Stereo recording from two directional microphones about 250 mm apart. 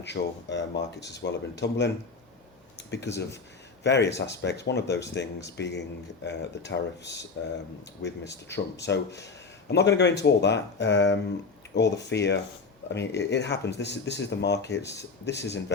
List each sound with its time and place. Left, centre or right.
0.0 s speech: left
2.9 s speech: left